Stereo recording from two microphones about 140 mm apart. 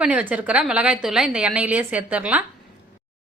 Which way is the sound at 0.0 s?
10° right (ahead or behind).